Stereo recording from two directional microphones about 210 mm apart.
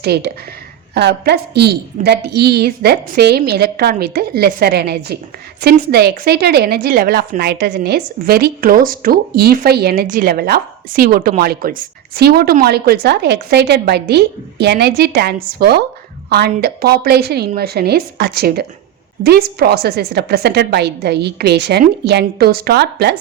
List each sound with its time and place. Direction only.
0.0 s a woman's voice: 50° right (ahead or behind)